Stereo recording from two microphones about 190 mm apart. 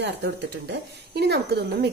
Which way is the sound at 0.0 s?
65° right (ahead or behind).